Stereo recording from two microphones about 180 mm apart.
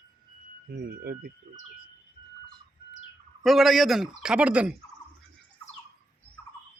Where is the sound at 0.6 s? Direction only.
60° right (ahead or behind).